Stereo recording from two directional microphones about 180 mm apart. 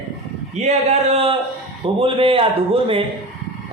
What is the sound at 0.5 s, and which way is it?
A man's voice, 35° right (ahead or behind).